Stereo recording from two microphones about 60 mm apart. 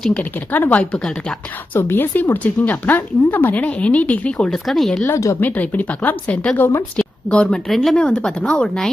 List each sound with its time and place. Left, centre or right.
0.1 s speech: left
4.5 s speech: centre
5.0 s speech: left
5.4 s a woman's voice: left
7.7 s speech: centre
7.9 s speech: centre